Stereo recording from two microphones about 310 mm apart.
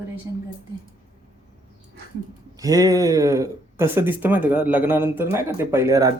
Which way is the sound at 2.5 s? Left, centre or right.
Centre.